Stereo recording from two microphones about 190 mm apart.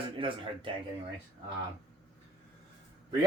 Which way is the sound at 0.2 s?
25° right (ahead or behind).